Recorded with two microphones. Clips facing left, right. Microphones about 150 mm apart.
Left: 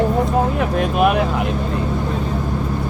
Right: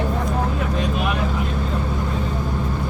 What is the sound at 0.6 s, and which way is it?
Speech, 60° left (ahead or behind).